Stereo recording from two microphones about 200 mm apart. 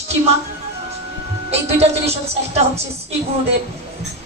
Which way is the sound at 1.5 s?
30° right (ahead or behind).